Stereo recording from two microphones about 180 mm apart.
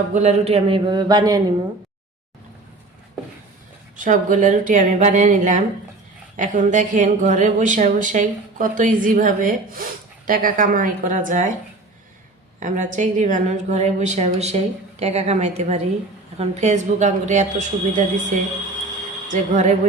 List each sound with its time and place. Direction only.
0.1 s a man's voice: 40° right (ahead or behind); by 1.5 s 20° right (ahead or behind)
3.9 s speech: 45° right (ahead or behind)
12.5 s a woman's voice: 45° right (ahead or behind)
19.3 s speech: 45° right (ahead or behind)